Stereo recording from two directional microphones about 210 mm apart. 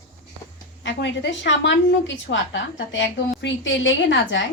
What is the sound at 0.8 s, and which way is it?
A woman's voice, 60° left (ahead or behind).